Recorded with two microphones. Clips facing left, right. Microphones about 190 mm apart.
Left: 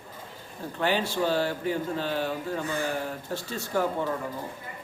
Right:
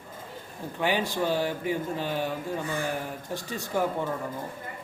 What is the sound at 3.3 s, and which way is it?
Speech, 15° right (ahead or behind).